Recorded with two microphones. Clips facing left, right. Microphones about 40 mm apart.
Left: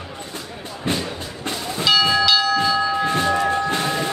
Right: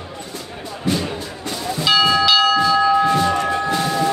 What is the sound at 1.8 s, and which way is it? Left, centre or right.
Bell, centre.